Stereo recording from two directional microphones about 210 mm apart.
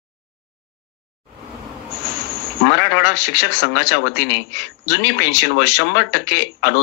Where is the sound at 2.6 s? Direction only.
60° left (ahead or behind).